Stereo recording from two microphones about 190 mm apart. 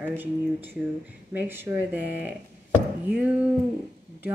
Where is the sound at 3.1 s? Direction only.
5° right (ahead or behind).